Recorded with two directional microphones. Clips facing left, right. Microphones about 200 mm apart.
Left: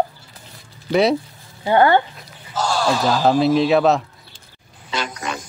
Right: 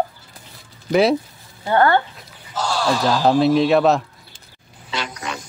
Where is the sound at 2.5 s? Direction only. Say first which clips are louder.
Left 2 dB; 45° left (ahead or behind).